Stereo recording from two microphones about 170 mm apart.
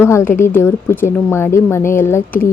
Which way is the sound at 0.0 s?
15° left (ahead or behind).